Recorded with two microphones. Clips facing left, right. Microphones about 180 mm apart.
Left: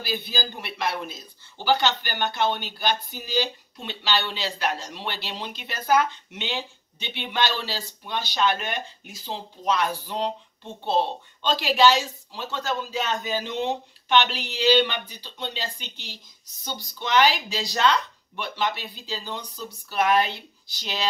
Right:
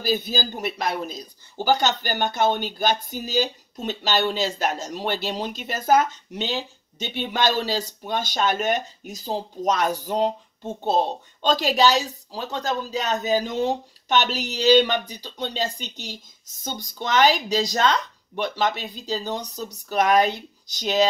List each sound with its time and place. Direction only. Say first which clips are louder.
0.0 s speech: right 6 dB; 45° right (ahead or behind)